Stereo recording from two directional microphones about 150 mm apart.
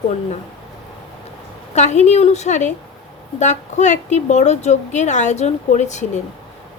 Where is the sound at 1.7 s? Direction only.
50° left (ahead or behind).